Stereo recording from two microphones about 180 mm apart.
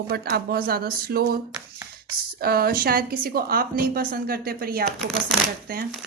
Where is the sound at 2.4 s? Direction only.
60° right (ahead or behind).